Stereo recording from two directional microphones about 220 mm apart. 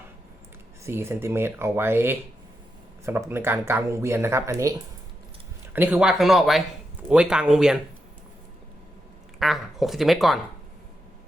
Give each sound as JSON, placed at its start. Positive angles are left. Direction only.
{"t": 0.9, "sound": "speech", "side_deg": -10}
{"t": 5.7, "sound": "speech", "side_deg": -5}
{"t": 9.4, "sound": "speech", "side_deg": 0}